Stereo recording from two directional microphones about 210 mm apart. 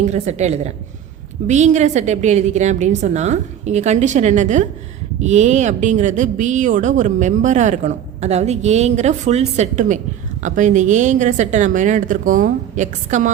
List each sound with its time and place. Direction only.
0.0 s speech: 35° right (ahead or behind)